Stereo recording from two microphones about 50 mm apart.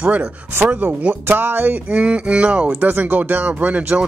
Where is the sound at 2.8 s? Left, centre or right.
Right.